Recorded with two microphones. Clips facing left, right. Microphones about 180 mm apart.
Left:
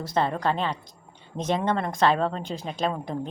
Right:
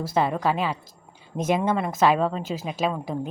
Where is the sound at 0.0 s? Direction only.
10° right (ahead or behind).